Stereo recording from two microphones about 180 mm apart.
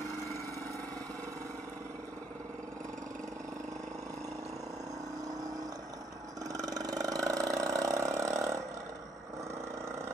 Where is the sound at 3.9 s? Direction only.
20° right (ahead or behind).